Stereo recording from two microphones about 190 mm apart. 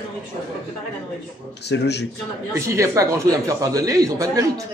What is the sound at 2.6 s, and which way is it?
A man's voice, 15° right (ahead or behind).